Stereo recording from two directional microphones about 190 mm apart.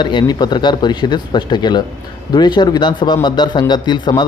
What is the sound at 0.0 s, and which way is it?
Speech, 25° left (ahead or behind).